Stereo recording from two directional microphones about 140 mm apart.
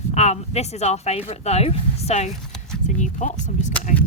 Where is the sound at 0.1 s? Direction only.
50° left (ahead or behind).